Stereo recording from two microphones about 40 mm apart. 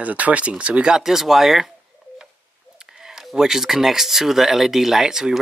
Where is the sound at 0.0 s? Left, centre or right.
Right.